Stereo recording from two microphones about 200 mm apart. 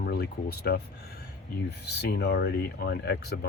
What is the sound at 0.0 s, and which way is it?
Speech, 50° left (ahead or behind).